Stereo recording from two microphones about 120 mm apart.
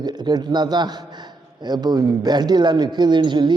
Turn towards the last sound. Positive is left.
turn(degrees=-40)  # may be behind; listen again after turning